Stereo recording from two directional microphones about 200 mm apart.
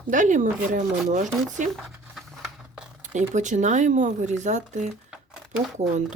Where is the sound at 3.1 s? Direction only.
40° right (ahead or behind).